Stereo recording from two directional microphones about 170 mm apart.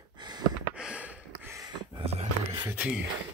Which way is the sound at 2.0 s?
35° right (ahead or behind).